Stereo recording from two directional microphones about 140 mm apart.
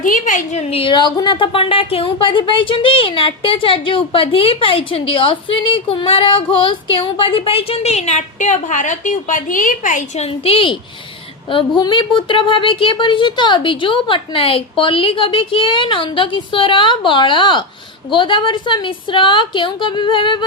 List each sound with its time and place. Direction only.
0.0 s a woman's voice: 70° left (ahead or behind)
0.7 s speech: 40° left (ahead or behind); by 10.2 s 70° left (ahead or behind)
10.2 s speech: 45° left (ahead or behind)
11.8 s speech: 35° left (ahead or behind)